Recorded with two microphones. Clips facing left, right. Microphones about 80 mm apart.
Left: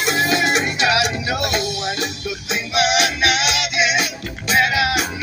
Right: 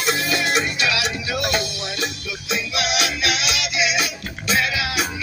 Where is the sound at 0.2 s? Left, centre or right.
Left.